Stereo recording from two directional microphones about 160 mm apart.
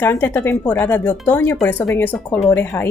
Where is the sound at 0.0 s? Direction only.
15° left (ahead or behind).